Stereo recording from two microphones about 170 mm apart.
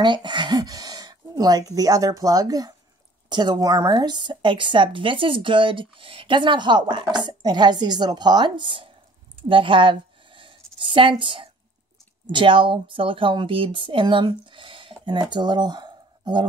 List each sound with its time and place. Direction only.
0.0 s speech: 25° right (ahead or behind)